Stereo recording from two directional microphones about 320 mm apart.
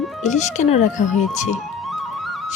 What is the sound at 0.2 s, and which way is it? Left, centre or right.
Speech, left.